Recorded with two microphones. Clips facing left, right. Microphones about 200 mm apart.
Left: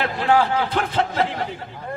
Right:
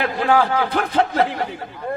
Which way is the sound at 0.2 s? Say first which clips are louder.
Right 1 dB; 50° right (ahead or behind).